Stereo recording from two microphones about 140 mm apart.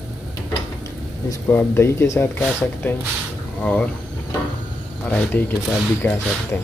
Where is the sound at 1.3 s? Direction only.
15° left (ahead or behind).